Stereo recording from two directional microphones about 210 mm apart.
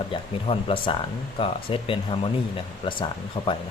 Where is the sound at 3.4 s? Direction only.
25° left (ahead or behind).